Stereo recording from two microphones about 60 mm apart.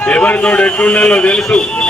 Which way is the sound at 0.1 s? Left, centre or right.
Left.